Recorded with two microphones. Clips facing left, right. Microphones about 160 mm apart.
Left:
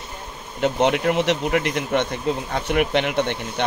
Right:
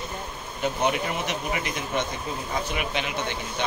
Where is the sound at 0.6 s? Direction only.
75° left (ahead or behind).